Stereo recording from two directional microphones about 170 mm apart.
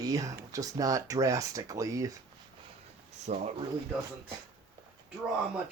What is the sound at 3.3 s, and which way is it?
Speech, 45° right (ahead or behind).